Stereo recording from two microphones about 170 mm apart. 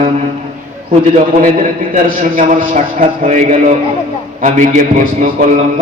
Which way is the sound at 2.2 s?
55° right (ahead or behind).